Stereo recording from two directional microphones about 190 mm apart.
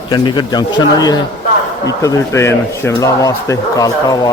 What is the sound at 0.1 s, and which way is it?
Speech, 20° left (ahead or behind).